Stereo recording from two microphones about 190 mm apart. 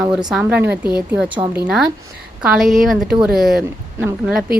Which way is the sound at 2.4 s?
5° right (ahead or behind).